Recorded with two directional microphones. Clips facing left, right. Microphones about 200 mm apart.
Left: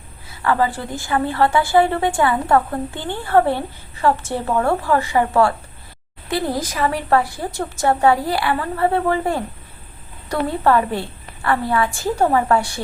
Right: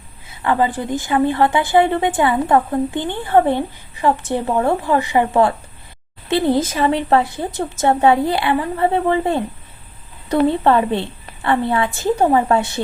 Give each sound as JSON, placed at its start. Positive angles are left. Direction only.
{"t": 0.3, "sound": "a woman's voice", "side_deg": -20}